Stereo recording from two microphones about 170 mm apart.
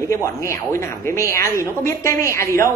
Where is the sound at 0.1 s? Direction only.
15° left (ahead or behind).